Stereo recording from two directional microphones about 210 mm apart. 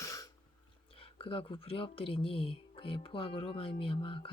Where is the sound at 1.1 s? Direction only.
25° left (ahead or behind).